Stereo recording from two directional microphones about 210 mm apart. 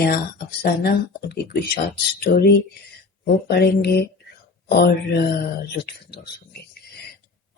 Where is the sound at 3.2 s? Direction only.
50° left (ahead or behind).